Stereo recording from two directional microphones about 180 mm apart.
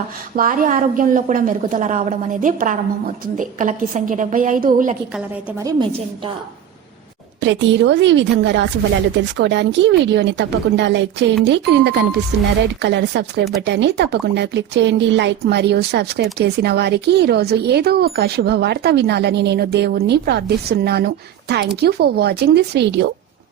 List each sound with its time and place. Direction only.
0.3 s a woman's voice: 50° right (ahead or behind)
7.4 s a woman's voice: 90° right; by 23.0 s 65° right (ahead or behind)